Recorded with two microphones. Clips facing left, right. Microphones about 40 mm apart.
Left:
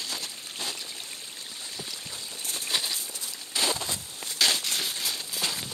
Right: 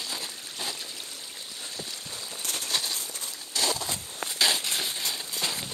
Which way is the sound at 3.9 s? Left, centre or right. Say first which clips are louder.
Right 2 dB; right.